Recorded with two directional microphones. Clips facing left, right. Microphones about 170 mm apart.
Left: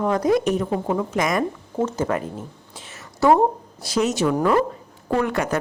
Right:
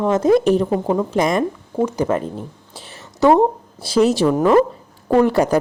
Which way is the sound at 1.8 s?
15° right (ahead or behind).